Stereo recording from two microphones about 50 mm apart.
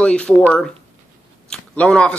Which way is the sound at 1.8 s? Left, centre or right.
Centre.